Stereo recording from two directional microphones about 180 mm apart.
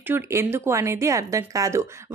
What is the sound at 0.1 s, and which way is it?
A woman's voice, 15° right (ahead or behind).